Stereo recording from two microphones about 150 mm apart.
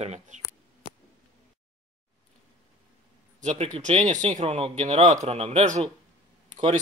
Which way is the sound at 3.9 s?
35° right (ahead or behind).